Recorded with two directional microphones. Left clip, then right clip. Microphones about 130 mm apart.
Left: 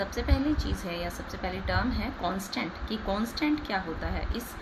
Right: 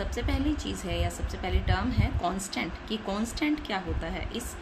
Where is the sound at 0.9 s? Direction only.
40° right (ahead or behind).